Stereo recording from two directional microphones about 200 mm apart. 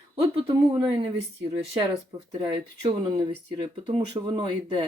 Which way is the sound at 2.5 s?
20° right (ahead or behind).